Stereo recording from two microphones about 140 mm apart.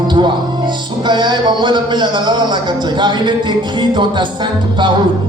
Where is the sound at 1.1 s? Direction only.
35° right (ahead or behind).